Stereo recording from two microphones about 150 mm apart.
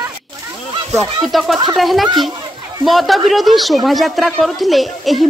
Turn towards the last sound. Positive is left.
turn(degrees=0)  # may be behind; listen again after turning